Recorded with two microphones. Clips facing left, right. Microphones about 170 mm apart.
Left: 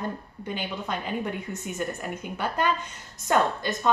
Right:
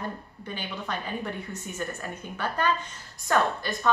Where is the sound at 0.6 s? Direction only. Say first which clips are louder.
Left 2 dB; 20° left (ahead or behind).